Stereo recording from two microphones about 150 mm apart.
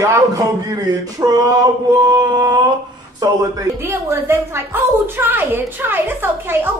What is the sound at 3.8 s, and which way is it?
A woman's voice, 15° right (ahead or behind).